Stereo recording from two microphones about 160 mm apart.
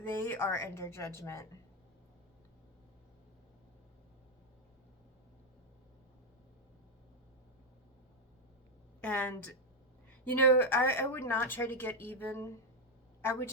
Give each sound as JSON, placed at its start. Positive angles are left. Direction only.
{"t": 0.0, "sound": "speech", "side_deg": 15}
{"t": 9.0, "sound": "speech", "side_deg": 10}